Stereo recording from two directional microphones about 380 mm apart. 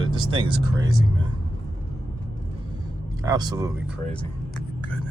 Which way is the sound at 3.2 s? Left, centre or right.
Centre.